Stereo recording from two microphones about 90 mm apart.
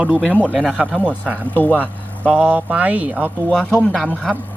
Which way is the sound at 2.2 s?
15° right (ahead or behind).